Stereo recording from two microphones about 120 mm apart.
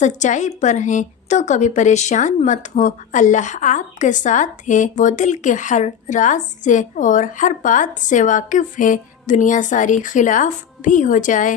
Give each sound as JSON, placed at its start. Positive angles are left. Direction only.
{"t": 0.0, "sound": "a woman's voice", "side_deg": 90}